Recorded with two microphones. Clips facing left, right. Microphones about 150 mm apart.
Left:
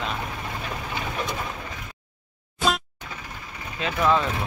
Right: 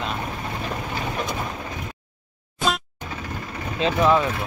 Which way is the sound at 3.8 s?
20° right (ahead or behind).